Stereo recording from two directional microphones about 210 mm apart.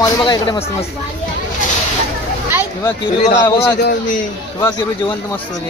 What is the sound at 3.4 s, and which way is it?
Speech, 20° left (ahead or behind).